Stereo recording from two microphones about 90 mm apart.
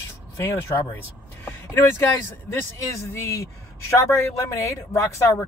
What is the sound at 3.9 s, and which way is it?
Speech, 30° left (ahead or behind).